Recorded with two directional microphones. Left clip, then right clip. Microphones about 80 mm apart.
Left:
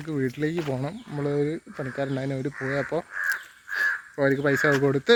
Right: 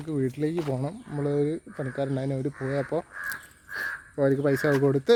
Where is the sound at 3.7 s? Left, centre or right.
Centre.